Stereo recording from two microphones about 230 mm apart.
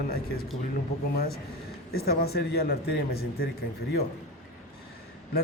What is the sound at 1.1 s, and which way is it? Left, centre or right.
Speech, left.